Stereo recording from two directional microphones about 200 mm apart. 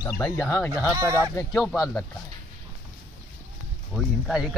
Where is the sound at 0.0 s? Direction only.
15° left (ahead or behind).